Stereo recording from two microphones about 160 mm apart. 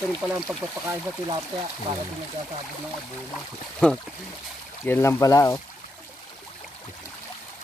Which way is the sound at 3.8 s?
5° left (ahead or behind).